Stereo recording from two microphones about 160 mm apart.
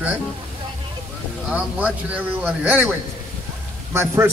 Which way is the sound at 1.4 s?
10° right (ahead or behind).